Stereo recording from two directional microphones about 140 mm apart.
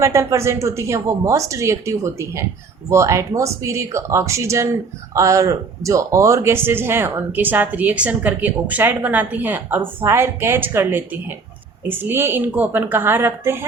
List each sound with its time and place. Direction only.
0.0 s speech: 20° right (ahead or behind)